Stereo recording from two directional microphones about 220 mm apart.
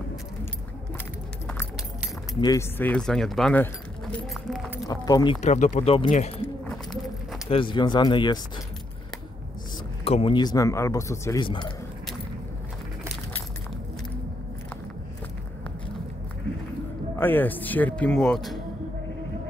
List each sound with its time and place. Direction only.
2.4 s speech: 10° left (ahead or behind)
4.8 s speech: 15° left (ahead or behind); by 6.4 s 35° left (ahead or behind)
7.4 s speech: 25° left (ahead or behind)
10.0 s speech: 25° left (ahead or behind)
17.2 s speech: 10° left (ahead or behind)